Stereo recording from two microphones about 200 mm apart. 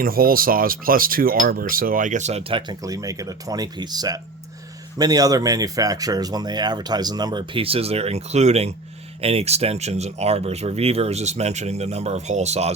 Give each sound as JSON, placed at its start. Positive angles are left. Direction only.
{"t": 0.0, "sound": "speech", "side_deg": -45}